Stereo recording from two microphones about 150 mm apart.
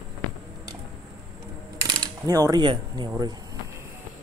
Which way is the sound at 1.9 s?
25° right (ahead or behind).